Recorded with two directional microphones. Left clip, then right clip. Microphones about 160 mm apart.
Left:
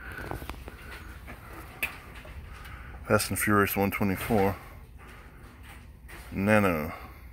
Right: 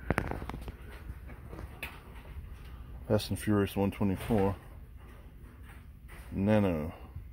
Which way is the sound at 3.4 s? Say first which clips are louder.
Left 6 dB; 30° right (ahead or behind).